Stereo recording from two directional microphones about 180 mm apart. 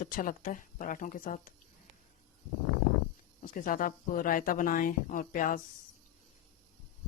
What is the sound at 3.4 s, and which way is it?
Speech, 45° left (ahead or behind).